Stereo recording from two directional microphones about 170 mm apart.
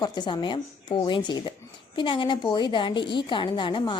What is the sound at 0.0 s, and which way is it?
A woman's voice, 25° left (ahead or behind).